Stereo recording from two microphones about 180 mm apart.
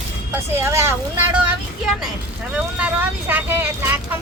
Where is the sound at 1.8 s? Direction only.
Centre (ahead or behind).